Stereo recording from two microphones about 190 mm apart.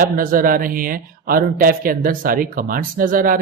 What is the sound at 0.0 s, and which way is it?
Speech, 45° right (ahead or behind).